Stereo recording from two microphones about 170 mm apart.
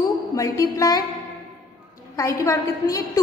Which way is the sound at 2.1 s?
20° left (ahead or behind).